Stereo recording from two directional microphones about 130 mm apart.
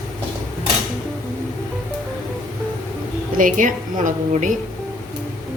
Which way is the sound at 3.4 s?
85° right.